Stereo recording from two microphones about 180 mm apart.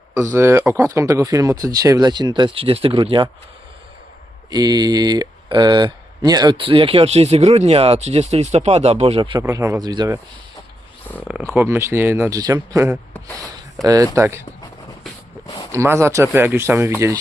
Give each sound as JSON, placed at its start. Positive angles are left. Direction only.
{"t": 0.1, "sound": "speech", "side_deg": -15}
{"t": 4.5, "sound": "speech", "side_deg": -20}
{"t": 9.4, "sound": "speech", "side_deg": -15}
{"t": 11.3, "sound": "speech", "side_deg": -10}
{"t": 15.7, "sound": "speech", "side_deg": -15}